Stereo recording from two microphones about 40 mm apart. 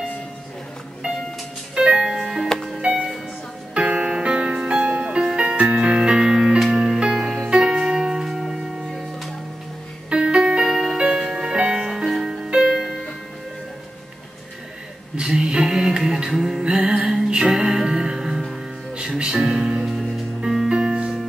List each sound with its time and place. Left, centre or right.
1.8 s music: right
2.0 s music: centre
3.7 s music: right
4.8 s music: right; by 7.4 s centre
7.4 s music: right
7.7 s music: centre
10.0 s music: right
10.6 s music: centre
11.0 s music: right
15.1 s music: right
16.6 s music: right
18.9 s music: right
19.9 s music: centre